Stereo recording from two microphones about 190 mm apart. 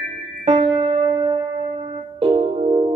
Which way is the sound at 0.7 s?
30° right (ahead or behind).